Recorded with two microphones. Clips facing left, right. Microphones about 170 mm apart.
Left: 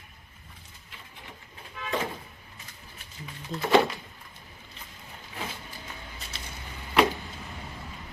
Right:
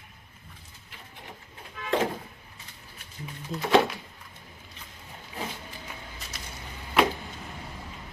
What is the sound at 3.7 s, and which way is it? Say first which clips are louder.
Speech: even; centre (ahead or behind).